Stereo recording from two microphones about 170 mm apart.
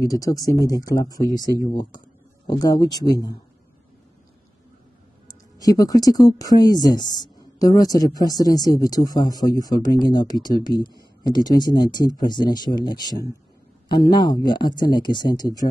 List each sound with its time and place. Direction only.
0.0 s speech: 20° left (ahead or behind)
5.3 s speech: 20° left (ahead or behind)